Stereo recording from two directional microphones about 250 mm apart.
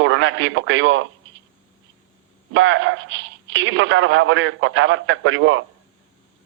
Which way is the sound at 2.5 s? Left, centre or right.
Right.